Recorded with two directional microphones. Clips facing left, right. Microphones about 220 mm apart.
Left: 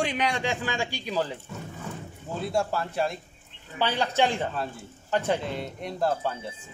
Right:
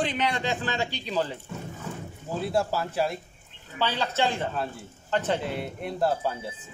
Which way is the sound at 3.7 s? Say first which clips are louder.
Left 2 dB; 15° left (ahead or behind).